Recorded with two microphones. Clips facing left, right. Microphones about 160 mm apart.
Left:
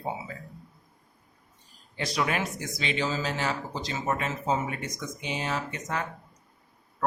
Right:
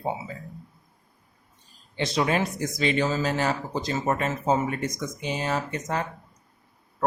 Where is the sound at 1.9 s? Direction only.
25° right (ahead or behind).